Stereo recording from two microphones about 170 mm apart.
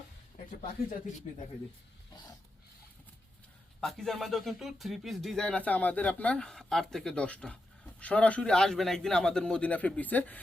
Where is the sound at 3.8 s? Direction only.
Centre (ahead or behind).